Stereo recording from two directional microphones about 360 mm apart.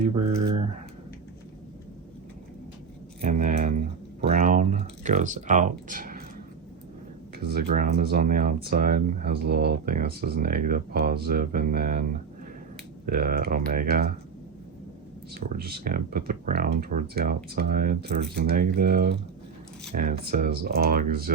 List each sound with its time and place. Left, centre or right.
3.2 s speech: right
7.3 s speech: right
15.4 s speech: right